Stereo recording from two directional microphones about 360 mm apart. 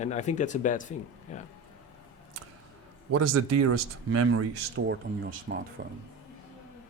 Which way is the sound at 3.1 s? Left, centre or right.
Right.